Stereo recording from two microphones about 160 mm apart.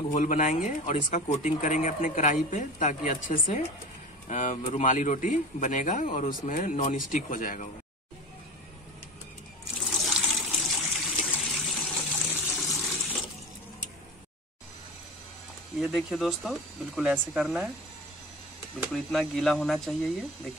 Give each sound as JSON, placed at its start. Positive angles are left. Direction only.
{"t": 0.1, "sound": "speech", "side_deg": 50}
{"t": 10.0, "sound": "water", "side_deg": 0}
{"t": 15.8, "sound": "speech", "side_deg": -5}
{"t": 19.1, "sound": "speech", "side_deg": 0}